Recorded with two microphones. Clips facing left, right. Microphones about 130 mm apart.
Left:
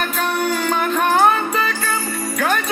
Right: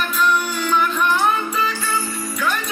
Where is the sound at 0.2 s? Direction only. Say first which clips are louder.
Right 1 dB; 50° left (ahead or behind).